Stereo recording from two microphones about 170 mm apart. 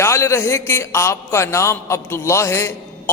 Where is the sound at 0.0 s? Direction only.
15° left (ahead or behind).